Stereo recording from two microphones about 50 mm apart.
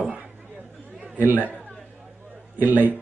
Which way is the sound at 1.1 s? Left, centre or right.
Right.